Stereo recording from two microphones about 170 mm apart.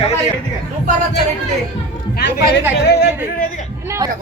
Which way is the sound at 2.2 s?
70° left (ahead or behind).